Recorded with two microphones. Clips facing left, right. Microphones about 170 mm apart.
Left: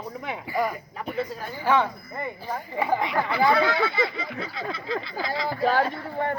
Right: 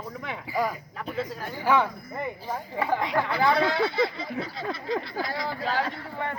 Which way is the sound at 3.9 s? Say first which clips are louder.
Right 1 dB; 70° left (ahead or behind).